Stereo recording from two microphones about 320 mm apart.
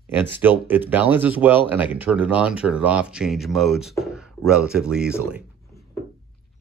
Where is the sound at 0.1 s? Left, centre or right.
Centre.